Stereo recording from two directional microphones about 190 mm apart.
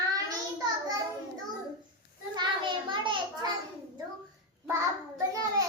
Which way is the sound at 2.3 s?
25° right (ahead or behind).